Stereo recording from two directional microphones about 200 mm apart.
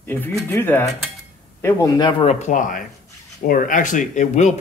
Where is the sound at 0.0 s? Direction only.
10° left (ahead or behind).